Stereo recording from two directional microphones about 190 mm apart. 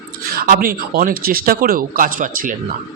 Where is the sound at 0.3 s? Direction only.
50° right (ahead or behind).